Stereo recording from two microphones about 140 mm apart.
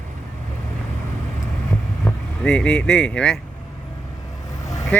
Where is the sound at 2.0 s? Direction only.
5° left (ahead or behind).